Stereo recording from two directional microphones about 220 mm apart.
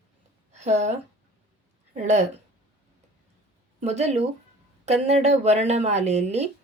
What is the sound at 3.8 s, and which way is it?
Speech, 30° right (ahead or behind).